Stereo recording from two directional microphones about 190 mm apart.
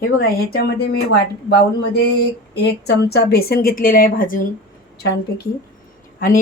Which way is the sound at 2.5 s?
60° left (ahead or behind).